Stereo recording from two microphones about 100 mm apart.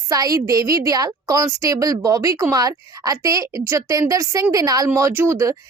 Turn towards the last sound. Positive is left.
turn(degrees=-30)  # may be behind; listen again after turning